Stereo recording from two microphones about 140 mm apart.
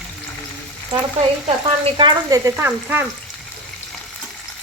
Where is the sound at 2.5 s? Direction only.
15° right (ahead or behind).